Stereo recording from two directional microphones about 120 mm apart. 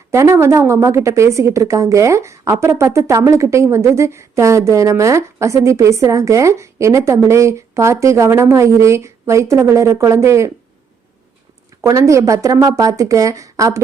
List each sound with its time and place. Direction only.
0.1 s a woman's voice: 25° right (ahead or behind)
11.8 s a woman's voice: 25° right (ahead or behind)